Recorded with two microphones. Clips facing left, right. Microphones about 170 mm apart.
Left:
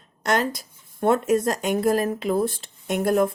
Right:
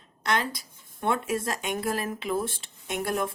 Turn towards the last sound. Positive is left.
turn(degrees=40)  # may be behind; listen again after turning